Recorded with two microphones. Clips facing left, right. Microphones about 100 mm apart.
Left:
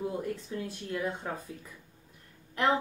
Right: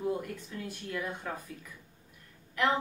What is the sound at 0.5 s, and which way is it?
Speech, 25° left (ahead or behind).